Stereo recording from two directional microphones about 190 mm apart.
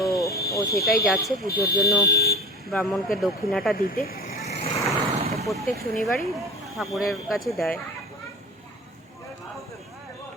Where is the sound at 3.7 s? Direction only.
50° left (ahead or behind).